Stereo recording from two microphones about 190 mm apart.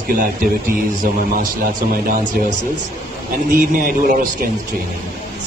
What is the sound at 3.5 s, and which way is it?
Speech, 45° right (ahead or behind).